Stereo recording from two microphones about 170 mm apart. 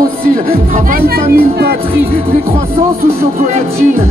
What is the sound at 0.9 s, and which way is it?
Speech, 65° right (ahead or behind).